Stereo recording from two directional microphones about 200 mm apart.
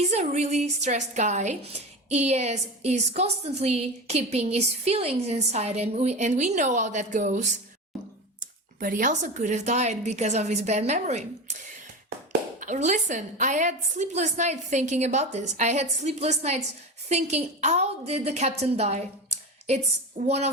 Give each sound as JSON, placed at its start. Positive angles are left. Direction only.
{"t": 0.1, "sound": "a woman's voice", "side_deg": -35}
{"t": 12.5, "sound": "a woman's voice", "side_deg": -40}